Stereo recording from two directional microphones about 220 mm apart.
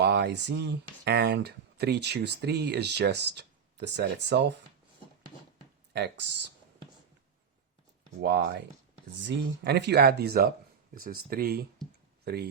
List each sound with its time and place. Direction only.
0.0 s speech: 50° right (ahead or behind)
5.9 s speech: 50° right (ahead or behind)
8.2 s speech: 50° right (ahead or behind)